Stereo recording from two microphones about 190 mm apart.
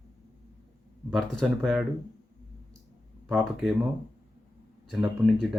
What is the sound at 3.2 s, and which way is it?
Speech, centre (ahead or behind).